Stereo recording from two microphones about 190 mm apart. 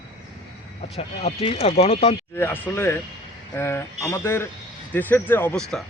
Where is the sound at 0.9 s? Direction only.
30° left (ahead or behind).